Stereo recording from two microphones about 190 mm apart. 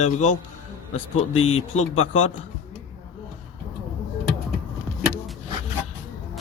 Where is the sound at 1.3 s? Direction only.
90° left.